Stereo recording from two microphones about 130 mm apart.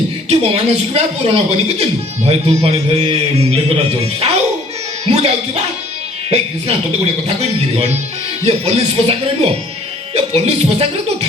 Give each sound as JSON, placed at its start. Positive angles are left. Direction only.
{"t": 0.3, "sound": "speech", "side_deg": -55}